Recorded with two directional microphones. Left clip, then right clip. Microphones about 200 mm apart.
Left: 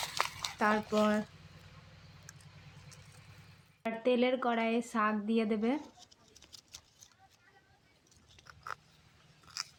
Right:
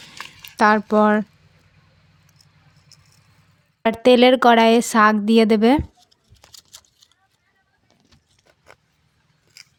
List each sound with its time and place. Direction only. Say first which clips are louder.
0.6 s speech: right 15 dB; 65° right (ahead or behind)
3.8 s a woman's voice: right 17 dB; 65° right (ahead or behind)